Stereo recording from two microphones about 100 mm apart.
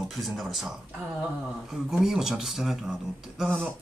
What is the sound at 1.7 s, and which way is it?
Speech, 5° right (ahead or behind).